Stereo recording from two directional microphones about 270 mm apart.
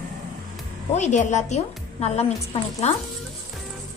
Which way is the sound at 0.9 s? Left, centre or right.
Left.